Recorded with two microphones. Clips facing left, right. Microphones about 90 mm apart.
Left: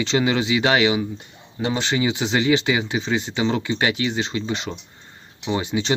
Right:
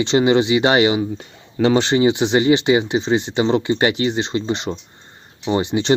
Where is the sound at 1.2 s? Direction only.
70° right (ahead or behind).